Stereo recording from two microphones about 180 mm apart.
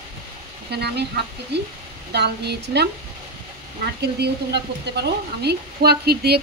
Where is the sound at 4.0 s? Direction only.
65° right (ahead or behind).